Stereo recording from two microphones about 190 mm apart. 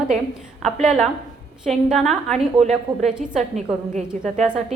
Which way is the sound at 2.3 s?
35° right (ahead or behind).